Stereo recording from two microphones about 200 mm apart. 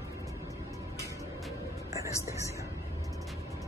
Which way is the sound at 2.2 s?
15° right (ahead or behind).